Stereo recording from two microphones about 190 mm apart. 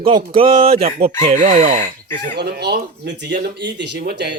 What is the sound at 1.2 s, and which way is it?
Speech, 40° right (ahead or behind).